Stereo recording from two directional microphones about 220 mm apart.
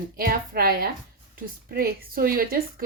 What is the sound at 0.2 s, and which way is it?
A woman's voice, 40° right (ahead or behind).